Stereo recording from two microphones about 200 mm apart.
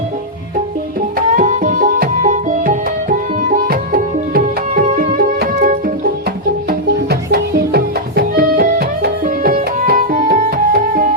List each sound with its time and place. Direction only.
1.4 s music: 40° right (ahead or behind)